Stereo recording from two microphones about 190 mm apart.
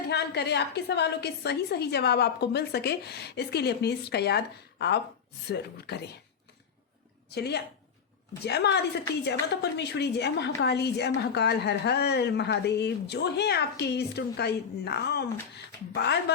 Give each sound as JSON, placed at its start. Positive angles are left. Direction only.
{"t": 0.1, "sound": "a woman's voice", "side_deg": 60}
{"t": 7.3, "sound": "a woman's voice", "side_deg": 60}